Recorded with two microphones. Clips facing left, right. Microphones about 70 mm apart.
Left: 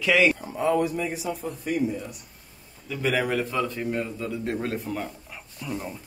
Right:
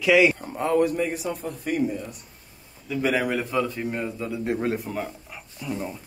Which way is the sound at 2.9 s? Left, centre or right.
Centre.